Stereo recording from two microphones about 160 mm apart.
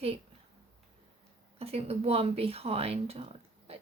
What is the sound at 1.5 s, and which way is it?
Speech, 40° right (ahead or behind).